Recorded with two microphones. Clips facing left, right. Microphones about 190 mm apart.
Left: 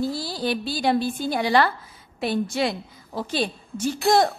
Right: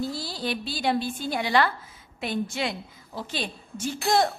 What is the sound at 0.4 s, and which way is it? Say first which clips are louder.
A woman's voice: left 5 dB; 40° left (ahead or behind).